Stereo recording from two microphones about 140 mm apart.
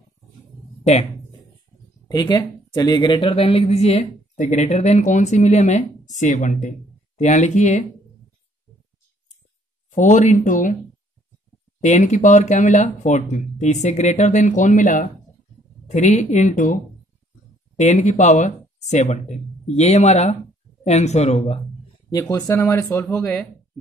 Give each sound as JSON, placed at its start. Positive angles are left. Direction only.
{"t": 2.0, "sound": "speech", "side_deg": 30}
{"t": 9.8, "sound": "speech", "side_deg": 60}
{"t": 11.8, "sound": "speech", "side_deg": 60}
{"t": 17.7, "sound": "speech", "side_deg": 55}
{"t": 22.3, "sound": "speech", "side_deg": 20}